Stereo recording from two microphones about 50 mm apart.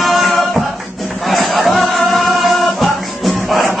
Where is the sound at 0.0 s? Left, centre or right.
Centre.